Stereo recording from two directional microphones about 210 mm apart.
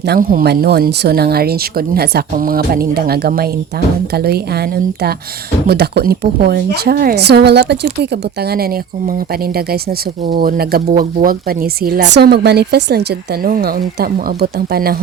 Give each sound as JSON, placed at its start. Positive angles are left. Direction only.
{"t": 0.0, "sound": "speech", "side_deg": -50}
{"t": 10.2, "sound": "speech", "side_deg": -45}